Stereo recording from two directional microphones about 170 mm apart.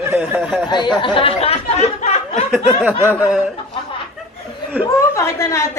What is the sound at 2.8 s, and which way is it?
Speech, 10° right (ahead or behind).